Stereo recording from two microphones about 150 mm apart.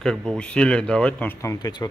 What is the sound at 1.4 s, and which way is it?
Speech, 25° left (ahead or behind).